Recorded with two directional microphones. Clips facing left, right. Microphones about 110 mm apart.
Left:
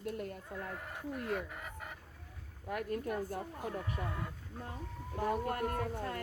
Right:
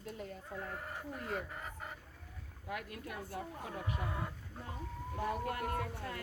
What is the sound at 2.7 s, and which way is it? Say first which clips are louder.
Speech: left 7 dB; 40° left (ahead or behind).